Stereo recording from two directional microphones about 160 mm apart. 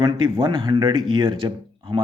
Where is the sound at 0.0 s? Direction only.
25° right (ahead or behind).